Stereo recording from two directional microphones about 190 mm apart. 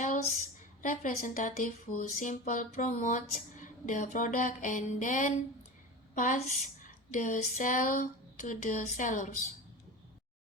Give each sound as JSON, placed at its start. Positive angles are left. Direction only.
{"t": 0.8, "sound": "speech", "side_deg": 45}